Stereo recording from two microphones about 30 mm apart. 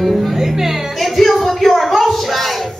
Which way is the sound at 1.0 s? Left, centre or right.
Centre.